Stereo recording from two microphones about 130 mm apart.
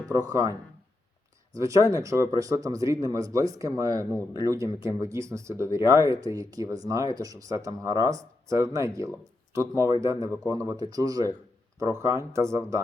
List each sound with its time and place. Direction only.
0.0 s speech: 25° right (ahead or behind)
1.5 s speech: 25° right (ahead or behind)